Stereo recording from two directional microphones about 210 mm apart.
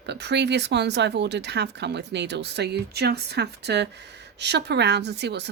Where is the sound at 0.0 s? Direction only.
55° right (ahead or behind).